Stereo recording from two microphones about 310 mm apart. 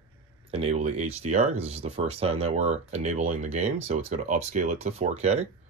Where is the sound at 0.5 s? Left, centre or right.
Centre.